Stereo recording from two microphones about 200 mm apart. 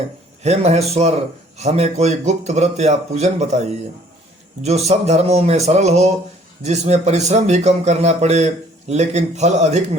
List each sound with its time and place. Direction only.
0.4 s a man's voice: 35° right (ahead or behind)
4.6 s a man's voice: 35° right (ahead or behind)